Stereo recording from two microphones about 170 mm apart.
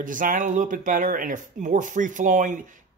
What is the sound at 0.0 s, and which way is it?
Speech, 50° right (ahead or behind).